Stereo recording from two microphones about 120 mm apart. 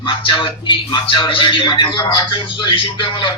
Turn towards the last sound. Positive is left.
turn(degrees=45)  # may be behind; listen again after turning